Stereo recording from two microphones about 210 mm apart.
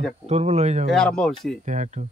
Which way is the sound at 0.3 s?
30° right (ahead or behind).